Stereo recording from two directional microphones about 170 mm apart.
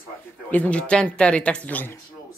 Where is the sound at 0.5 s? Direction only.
10° left (ahead or behind).